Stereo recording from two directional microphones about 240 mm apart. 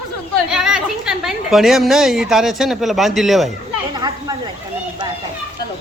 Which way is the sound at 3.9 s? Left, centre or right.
Centre.